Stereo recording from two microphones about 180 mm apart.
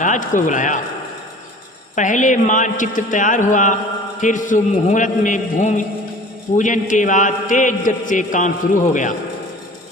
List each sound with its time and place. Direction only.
0.0 s a man's voice: 45° left (ahead or behind)
2.0 s a man's voice: 45° left (ahead or behind)